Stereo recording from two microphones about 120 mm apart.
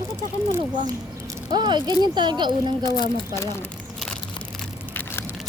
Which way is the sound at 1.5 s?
40° right (ahead or behind).